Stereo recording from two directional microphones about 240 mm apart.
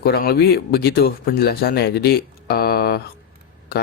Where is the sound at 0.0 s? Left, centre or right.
Left.